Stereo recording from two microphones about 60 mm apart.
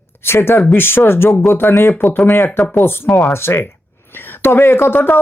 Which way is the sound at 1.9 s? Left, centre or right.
Left.